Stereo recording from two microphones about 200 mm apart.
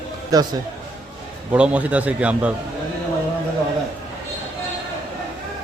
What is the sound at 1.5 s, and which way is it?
A man's voice, 5° right (ahead or behind).